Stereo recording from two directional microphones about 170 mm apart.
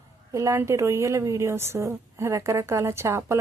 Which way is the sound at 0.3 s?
20° right (ahead or behind).